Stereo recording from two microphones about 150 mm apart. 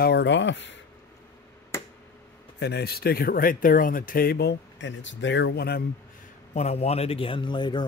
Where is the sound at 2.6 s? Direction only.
90° left.